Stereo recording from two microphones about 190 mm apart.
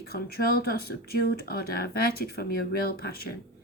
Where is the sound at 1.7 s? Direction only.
55° left (ahead or behind).